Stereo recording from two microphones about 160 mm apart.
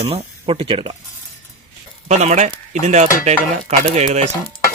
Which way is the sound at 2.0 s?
45° right (ahead or behind).